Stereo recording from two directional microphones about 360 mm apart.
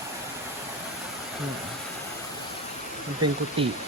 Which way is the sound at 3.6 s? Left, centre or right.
Centre.